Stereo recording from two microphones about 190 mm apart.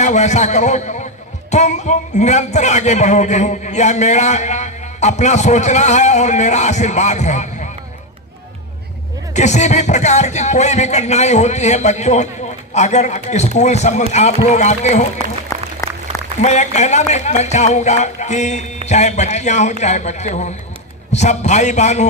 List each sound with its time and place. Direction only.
0.0 s speech: 35° left (ahead or behind)
9.3 s speech: 40° left (ahead or behind)
15.5 s applause: 15° left (ahead or behind)
16.4 s speech: 35° left (ahead or behind)